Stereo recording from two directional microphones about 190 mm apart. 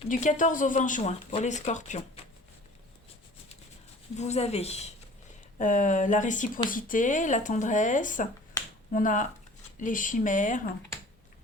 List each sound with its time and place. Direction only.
0.1 s speech: 40° left (ahead or behind)
4.2 s speech: 35° left (ahead or behind)